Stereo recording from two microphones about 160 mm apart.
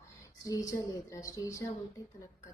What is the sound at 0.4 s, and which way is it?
A woman's voice, 20° left (ahead or behind).